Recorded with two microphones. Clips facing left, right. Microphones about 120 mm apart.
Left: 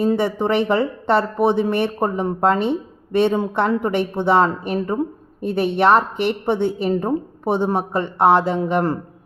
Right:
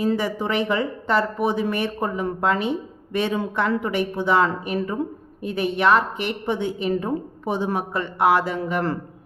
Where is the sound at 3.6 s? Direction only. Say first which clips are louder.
Left 2 dB; 35° left (ahead or behind).